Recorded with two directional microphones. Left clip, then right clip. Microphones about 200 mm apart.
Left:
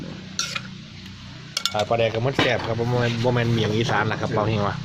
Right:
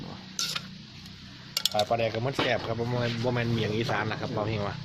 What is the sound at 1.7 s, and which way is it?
Speech, centre (ahead or behind).